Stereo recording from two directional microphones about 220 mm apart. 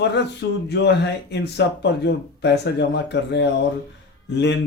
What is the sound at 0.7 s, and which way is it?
Speech, 50° left (ahead or behind).